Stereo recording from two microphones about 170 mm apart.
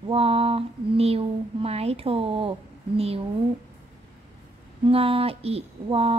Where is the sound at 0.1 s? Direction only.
35° right (ahead or behind).